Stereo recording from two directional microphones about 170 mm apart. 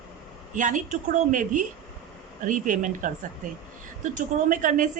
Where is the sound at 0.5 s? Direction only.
50° right (ahead or behind).